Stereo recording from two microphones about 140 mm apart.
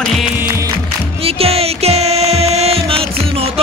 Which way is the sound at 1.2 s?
45° right (ahead or behind).